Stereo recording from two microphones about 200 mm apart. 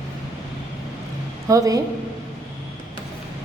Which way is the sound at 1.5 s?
15° right (ahead or behind).